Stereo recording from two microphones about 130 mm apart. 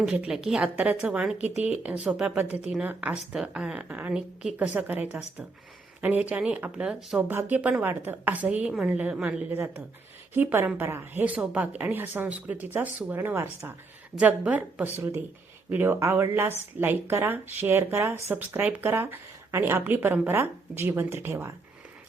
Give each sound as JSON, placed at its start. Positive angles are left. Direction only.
{"t": 0.0, "sound": "a woman's voice", "side_deg": -5}